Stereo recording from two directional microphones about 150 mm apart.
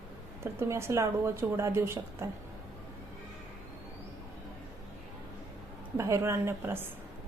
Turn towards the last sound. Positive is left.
turn(degrees=-15)  # may be behind; listen again after turning